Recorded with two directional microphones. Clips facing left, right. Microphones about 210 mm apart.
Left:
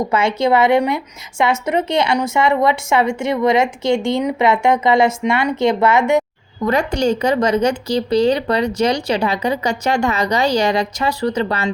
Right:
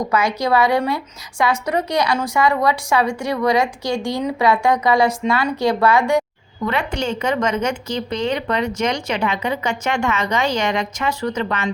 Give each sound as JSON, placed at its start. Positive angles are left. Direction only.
{"t": 0.0, "sound": "a woman's voice", "side_deg": 25}
{"t": 6.7, "sound": "speech", "side_deg": 40}